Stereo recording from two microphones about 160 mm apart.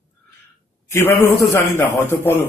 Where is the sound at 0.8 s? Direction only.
15° left (ahead or behind).